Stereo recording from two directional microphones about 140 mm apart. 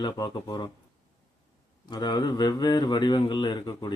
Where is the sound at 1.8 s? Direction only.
30° left (ahead or behind).